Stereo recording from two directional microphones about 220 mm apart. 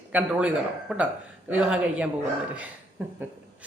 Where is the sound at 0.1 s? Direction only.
5° right (ahead or behind).